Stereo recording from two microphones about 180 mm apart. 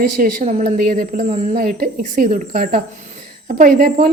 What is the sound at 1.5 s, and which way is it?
A woman's voice, 55° right (ahead or behind).